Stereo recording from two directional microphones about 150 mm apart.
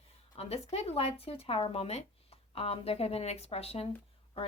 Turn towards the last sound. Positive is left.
turn(degrees=40)  # may be behind; listen again after turning